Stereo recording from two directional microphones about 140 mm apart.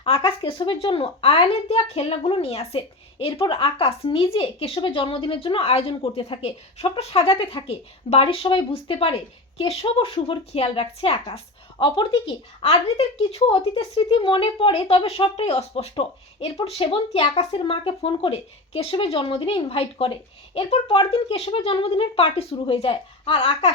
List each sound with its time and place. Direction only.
0.0 s speech: 45° left (ahead or behind)
12.6 s speech: 45° left (ahead or behind)